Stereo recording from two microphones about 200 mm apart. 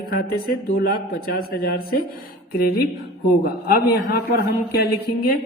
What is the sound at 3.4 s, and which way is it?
Speech, 50° left (ahead or behind).